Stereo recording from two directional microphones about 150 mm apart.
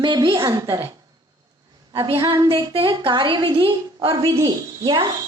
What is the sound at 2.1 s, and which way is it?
Speech, 20° right (ahead or behind).